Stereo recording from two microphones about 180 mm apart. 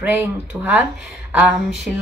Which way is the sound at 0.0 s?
10° right (ahead or behind).